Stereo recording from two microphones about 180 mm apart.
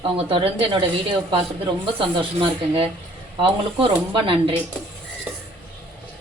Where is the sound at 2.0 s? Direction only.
30° right (ahead or behind).